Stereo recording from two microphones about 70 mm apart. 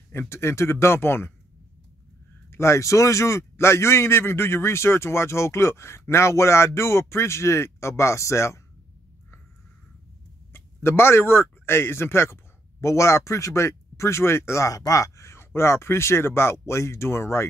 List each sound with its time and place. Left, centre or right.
0.1 s speech: left
2.5 s speech: left
10.5 s speech: left